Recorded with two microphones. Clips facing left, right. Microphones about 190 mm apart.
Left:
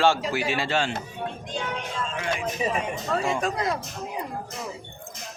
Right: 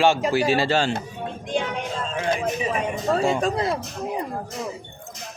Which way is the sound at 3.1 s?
30° right (ahead or behind).